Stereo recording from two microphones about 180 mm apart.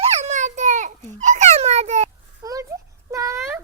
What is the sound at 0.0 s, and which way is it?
Babbling, 35° right (ahead or behind).